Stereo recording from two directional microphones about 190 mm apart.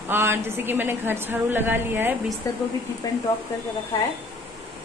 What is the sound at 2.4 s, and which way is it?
Speech, 15° left (ahead or behind).